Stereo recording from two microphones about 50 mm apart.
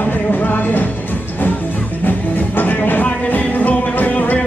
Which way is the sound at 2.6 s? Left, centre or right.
Left.